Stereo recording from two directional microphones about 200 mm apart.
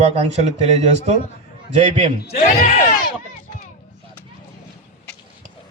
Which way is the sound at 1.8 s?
35° right (ahead or behind).